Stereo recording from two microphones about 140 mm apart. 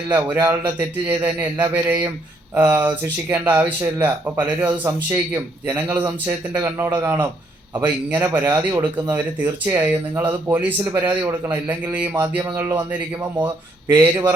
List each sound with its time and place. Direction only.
0.1 s speech: 15° right (ahead or behind)